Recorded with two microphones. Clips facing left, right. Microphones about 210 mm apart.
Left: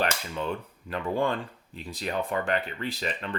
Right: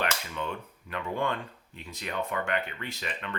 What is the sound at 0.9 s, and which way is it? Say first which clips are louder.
Speech: left 4 dB; 35° left (ahead or behind).